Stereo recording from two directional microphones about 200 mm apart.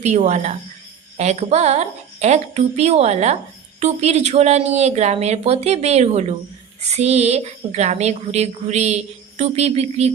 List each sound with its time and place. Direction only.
0.0 s a woman's voice: 35° right (ahead or behind)